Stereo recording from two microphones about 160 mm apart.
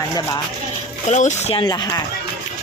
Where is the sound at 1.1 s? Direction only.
45° left (ahead or behind).